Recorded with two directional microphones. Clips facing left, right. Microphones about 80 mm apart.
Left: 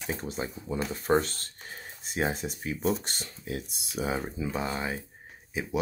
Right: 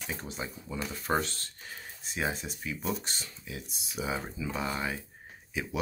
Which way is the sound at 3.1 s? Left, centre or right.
Left.